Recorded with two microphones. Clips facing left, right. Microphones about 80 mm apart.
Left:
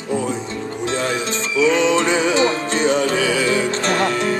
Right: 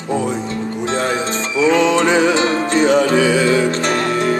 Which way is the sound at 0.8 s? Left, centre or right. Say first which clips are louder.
Right 2 dB; right.